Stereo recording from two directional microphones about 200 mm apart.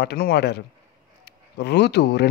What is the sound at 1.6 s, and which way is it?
Speech, 55° left (ahead or behind).